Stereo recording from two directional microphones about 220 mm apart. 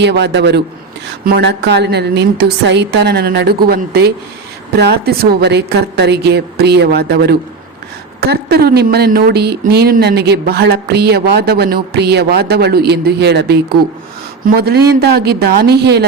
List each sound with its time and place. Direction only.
0.0 s speech: 50° right (ahead or behind)